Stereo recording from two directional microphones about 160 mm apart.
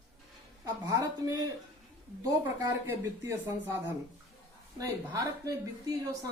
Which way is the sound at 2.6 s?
15° right (ahead or behind).